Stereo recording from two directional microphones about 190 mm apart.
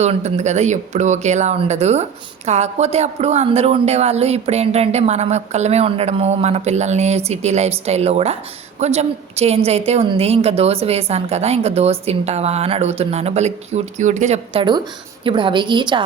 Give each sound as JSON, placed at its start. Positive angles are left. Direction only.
{"t": 0.0, "sound": "a woman's voice", "side_deg": -35}